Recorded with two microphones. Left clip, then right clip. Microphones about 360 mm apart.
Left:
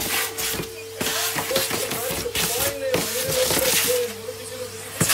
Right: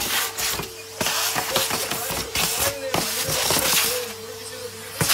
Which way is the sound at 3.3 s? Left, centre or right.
Centre.